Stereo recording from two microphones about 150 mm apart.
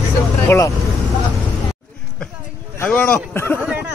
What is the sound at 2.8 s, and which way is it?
Speech, 10° left (ahead or behind).